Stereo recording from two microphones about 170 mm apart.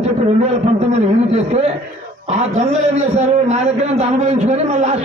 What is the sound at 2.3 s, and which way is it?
A man's voice, 40° right (ahead or behind).